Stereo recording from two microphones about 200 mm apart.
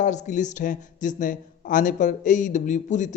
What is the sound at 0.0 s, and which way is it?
Speech, 35° left (ahead or behind).